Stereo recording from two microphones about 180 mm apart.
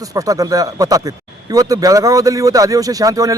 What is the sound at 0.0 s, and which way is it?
A man's voice, 20° right (ahead or behind).